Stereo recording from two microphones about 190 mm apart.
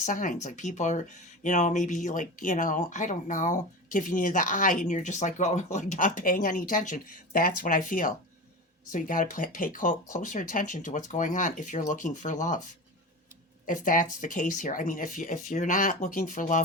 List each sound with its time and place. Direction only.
0.0 s speech: 40° left (ahead or behind)
13.7 s speech: 45° left (ahead or behind)